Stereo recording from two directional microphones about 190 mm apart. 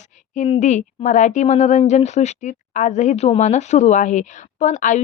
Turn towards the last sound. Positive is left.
turn(degrees=40)  # may be behind; listen again after turning